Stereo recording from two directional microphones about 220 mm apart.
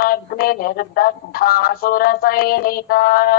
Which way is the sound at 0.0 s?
40° left (ahead or behind).